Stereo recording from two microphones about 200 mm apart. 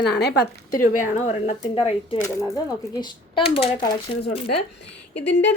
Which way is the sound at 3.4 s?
30° left (ahead or behind).